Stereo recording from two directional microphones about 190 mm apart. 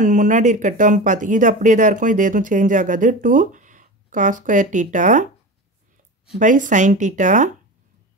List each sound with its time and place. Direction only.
0.0 s speech: 40° right (ahead or behind)
6.3 s speech: 40° right (ahead or behind)